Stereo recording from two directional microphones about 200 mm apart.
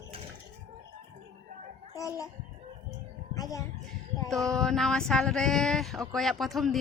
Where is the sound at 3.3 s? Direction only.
15° left (ahead or behind).